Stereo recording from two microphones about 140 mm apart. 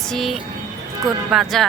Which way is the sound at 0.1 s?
Centre (ahead or behind).